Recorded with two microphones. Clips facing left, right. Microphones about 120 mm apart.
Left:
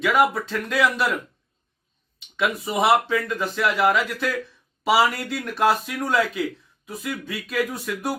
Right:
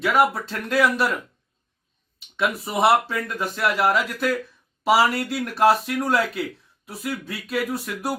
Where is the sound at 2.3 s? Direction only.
Centre (ahead or behind).